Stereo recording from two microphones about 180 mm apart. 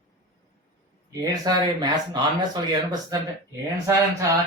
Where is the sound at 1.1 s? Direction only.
20° right (ahead or behind).